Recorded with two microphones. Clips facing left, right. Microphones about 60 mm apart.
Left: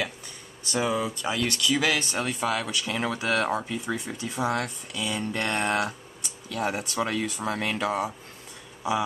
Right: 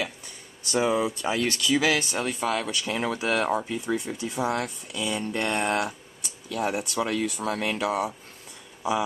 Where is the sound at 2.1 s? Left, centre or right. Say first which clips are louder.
Even; centre.